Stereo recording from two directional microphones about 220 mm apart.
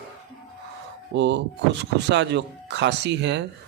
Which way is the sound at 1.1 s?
55° right (ahead or behind).